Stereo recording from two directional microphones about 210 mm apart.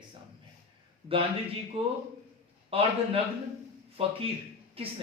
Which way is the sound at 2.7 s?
25° right (ahead or behind).